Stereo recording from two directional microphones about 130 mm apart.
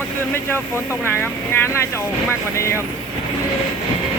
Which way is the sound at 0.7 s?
15° left (ahead or behind).